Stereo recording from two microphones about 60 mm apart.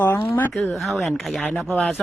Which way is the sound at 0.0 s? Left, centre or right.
Left.